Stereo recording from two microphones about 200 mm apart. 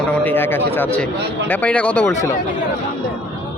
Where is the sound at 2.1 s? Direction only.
35° left (ahead or behind).